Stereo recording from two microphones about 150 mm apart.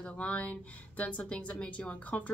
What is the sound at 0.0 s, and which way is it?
Speech, 10° left (ahead or behind).